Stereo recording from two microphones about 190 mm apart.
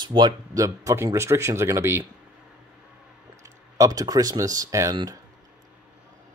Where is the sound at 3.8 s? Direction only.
20° right (ahead or behind).